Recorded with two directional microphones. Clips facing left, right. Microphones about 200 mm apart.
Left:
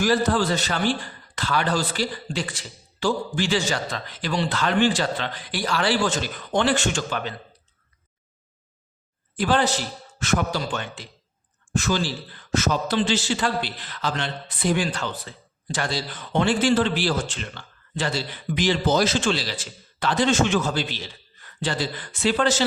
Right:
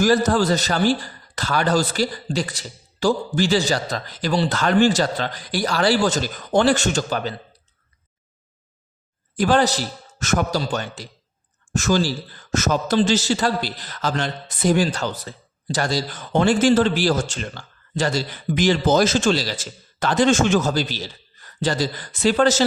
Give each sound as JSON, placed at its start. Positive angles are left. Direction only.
{"t": 0.0, "sound": "a man's voice", "side_deg": -45}
{"t": 9.3, "sound": "a man's voice", "side_deg": -45}